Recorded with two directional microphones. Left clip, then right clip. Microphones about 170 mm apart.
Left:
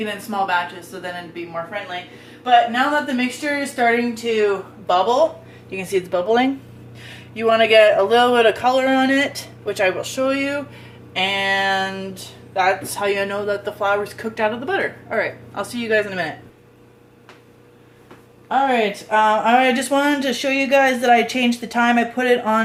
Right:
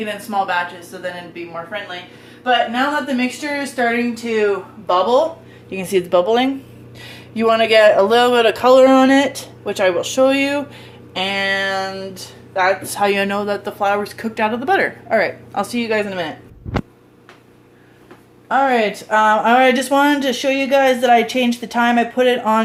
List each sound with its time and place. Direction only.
0.0 s a woman's voice: 10° right (ahead or behind)
5.7 s a man's voice: 40° right (ahead or behind)
12.6 s a man's voice: 35° right (ahead or behind)
18.4 s speech: 45° right (ahead or behind); by 22.6 s 10° right (ahead or behind)